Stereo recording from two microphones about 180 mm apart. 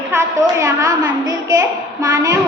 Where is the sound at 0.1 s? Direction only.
15° right (ahead or behind).